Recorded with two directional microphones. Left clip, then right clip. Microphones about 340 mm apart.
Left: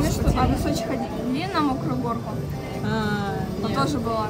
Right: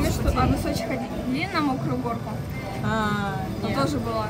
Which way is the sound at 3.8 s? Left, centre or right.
Centre.